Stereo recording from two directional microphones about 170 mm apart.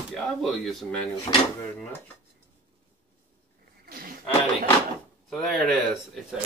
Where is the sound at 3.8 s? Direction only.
60° right (ahead or behind).